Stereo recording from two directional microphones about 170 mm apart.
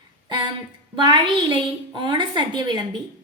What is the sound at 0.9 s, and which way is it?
A woman's voice, 25° right (ahead or behind).